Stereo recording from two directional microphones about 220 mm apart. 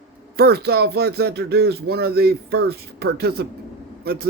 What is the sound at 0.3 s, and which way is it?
A man's voice, 45° right (ahead or behind).